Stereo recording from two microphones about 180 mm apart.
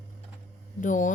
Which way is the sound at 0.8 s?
45° left (ahead or behind).